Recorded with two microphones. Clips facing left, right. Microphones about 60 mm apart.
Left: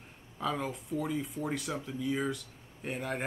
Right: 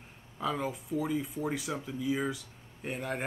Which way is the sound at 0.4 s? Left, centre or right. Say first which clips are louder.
Right 1 dB; centre.